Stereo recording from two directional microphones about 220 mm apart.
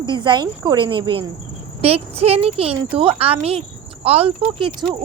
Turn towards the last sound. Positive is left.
turn(degrees=-25)  # may be behind; listen again after turning